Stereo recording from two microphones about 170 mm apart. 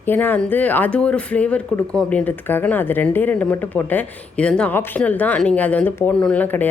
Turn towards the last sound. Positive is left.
turn(degrees=10)  # may be behind; listen again after turning